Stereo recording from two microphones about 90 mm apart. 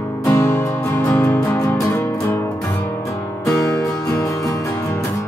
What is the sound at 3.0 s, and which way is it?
Music, 35° left (ahead or behind).